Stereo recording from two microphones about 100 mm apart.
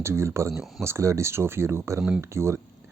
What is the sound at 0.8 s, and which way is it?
Speech, 30° right (ahead or behind).